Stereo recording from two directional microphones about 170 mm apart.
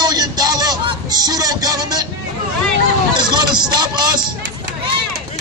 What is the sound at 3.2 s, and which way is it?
Speech, 25° right (ahead or behind).